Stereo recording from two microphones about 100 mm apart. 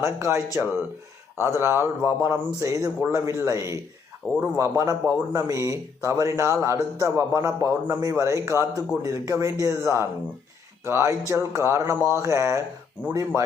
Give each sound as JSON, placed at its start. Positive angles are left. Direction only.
{"t": 0.0, "sound": "a man's voice", "side_deg": -30}
{"t": 13.0, "sound": "speech", "side_deg": 15}